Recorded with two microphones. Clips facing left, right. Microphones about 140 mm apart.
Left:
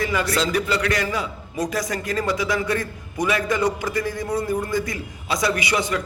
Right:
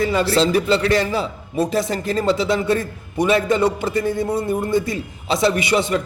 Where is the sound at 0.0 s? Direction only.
30° right (ahead or behind).